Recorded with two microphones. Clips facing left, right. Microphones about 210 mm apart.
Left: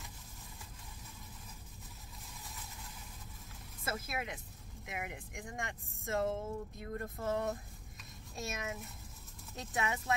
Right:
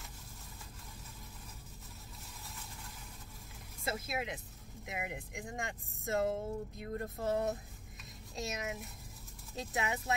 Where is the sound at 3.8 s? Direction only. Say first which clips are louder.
Right 2 dB; 20° right (ahead or behind).